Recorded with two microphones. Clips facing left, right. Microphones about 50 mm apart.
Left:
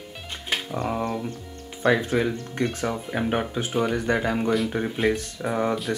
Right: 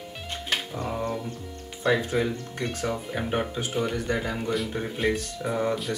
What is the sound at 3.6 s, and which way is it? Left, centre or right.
Speech, left.